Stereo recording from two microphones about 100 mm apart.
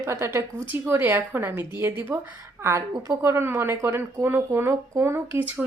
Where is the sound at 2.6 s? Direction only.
30° right (ahead or behind).